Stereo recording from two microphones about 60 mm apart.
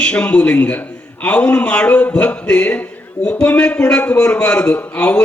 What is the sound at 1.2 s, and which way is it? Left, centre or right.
A man's voice, left.